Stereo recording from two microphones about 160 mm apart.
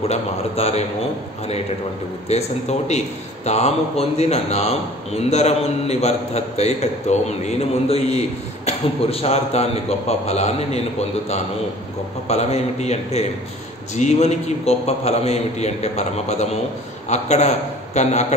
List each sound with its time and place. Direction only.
0.1 s a man's voice: 40° left (ahead or behind)
2.3 s a man's voice: 40° left (ahead or behind)
12.3 s a man's voice: 45° left (ahead or behind)